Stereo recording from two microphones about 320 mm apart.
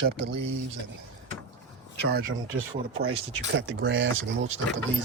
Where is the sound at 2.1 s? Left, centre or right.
Right.